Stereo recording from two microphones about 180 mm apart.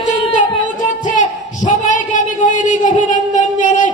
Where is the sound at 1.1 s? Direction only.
45° left (ahead or behind).